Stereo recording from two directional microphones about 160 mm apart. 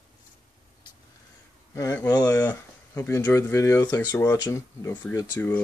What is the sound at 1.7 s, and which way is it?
Speech, 15° left (ahead or behind).